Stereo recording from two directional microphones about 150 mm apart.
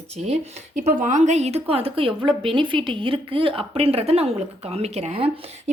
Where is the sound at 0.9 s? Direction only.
60° right (ahead or behind); by 5.3 s 40° right (ahead or behind).